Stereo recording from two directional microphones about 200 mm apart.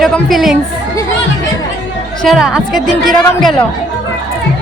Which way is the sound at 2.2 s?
Centre (ahead or behind).